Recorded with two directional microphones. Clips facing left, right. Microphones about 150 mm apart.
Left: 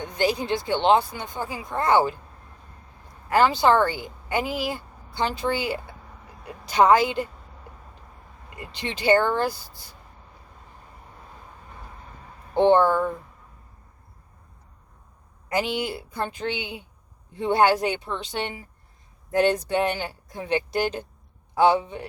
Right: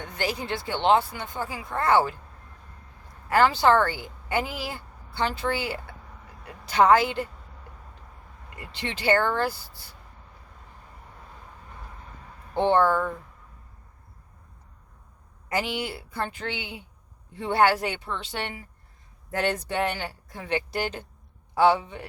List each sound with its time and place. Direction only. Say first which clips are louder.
0.0 s a woman's voice: left 6 dB; 15° left (ahead or behind)
3.3 s a woman's voice: left 1 dB; 15° left (ahead or behind)
8.5 s a woman's voice: left 2 dB; 20° left (ahead or behind)
12.5 s a woman's voice: left 3 dB; 15° left (ahead or behind)
15.4 s a woman's voice: left 3 dB; 15° left (ahead or behind)